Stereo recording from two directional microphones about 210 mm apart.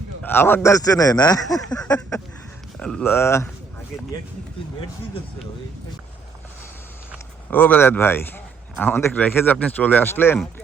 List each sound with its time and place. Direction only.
0.2 s speech: 10° left (ahead or behind)
7.5 s speech: 10° left (ahead or behind)